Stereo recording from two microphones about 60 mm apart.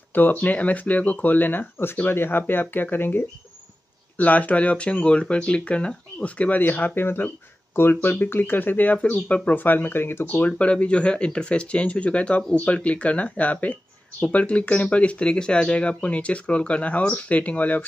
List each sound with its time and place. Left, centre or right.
0.1 s speech: left
4.2 s speech: left
10.2 s speech: left